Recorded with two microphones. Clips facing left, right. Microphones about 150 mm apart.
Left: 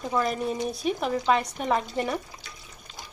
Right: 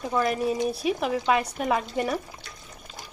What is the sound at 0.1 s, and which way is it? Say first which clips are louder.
Speech: right 2 dB; 5° right (ahead or behind).